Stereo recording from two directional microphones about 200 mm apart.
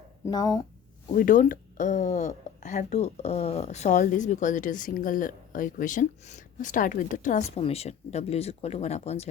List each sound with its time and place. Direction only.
0.3 s speech: 20° left (ahead or behind)
1.1 s speech: 40° left (ahead or behind)